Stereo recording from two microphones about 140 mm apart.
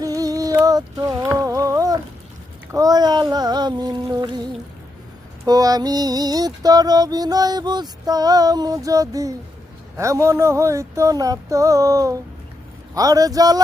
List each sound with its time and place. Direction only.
0.0 s music: 25° right (ahead or behind)
5.5 s music: 25° right (ahead or behind)